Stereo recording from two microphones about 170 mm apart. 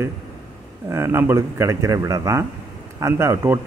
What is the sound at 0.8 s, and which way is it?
A man's voice, 15° right (ahead or behind).